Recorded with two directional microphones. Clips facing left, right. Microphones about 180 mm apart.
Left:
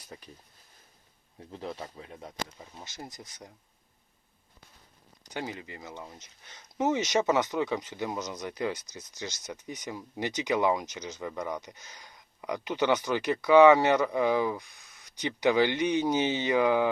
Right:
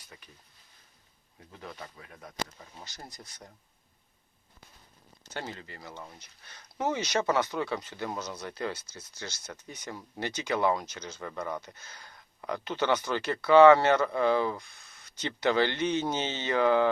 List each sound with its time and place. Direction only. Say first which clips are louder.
0.1 s speech: left 7 dB; 35° left (ahead or behind)
1.5 s speech: left 6 dB; 30° left (ahead or behind)
5.2 s speech: left 3 dB; 15° left (ahead or behind)